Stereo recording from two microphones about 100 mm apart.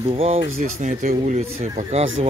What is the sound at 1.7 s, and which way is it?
Speech, 75° right (ahead or behind).